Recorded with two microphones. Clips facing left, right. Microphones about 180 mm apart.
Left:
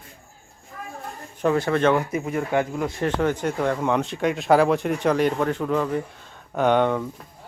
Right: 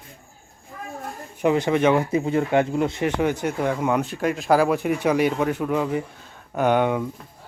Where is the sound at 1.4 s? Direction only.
15° right (ahead or behind).